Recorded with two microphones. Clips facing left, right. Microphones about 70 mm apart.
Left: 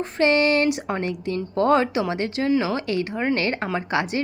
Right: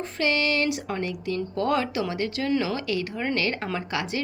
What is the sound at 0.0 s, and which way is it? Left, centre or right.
A woman's voice, left.